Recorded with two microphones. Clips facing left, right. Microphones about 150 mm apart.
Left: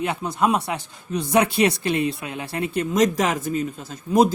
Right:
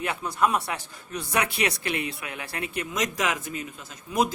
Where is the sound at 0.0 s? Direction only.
25° left (ahead or behind).